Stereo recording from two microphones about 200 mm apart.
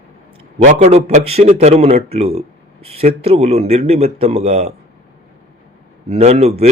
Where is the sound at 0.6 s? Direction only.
35° right (ahead or behind).